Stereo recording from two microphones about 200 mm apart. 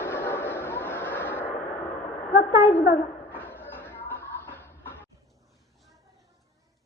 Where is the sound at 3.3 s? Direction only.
10° left (ahead or behind).